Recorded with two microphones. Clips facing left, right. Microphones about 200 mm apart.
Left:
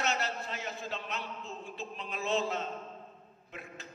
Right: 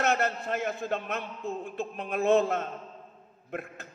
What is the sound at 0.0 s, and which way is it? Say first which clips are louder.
A man's voice: right 7 dB; 55° right (ahead or behind).